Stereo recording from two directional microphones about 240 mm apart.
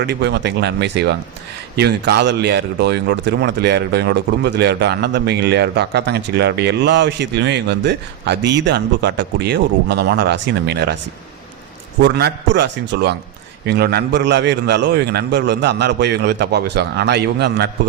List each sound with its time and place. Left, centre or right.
0.0 s speech: right
12.0 s speech: right